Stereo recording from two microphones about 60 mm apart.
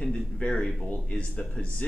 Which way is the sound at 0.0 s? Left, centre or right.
Centre.